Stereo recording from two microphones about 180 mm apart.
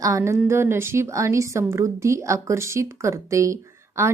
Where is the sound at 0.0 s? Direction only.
15° right (ahead or behind).